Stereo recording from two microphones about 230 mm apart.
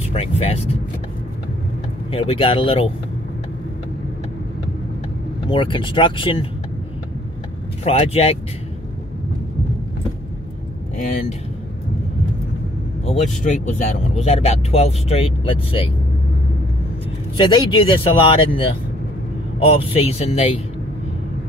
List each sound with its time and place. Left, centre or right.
0.1 s speech: left
2.0 s speech: left
5.5 s speech: left
7.8 s speech: left
11.0 s speech: left
13.0 s speech: left
17.4 s speech: centre
19.8 s speech: left